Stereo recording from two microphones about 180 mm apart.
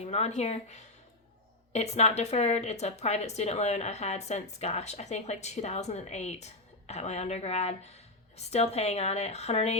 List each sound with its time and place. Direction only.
0.0 s speech: 35° left (ahead or behind)